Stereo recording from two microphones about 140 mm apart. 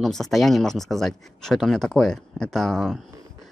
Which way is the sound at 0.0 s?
Centre (ahead or behind).